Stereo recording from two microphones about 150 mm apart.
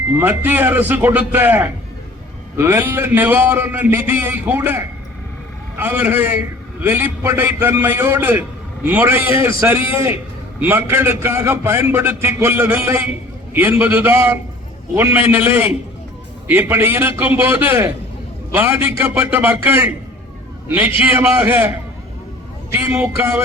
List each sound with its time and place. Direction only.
0.2 s a man's voice: 15° right (ahead or behind)
22.7 s a man's voice: 15° right (ahead or behind)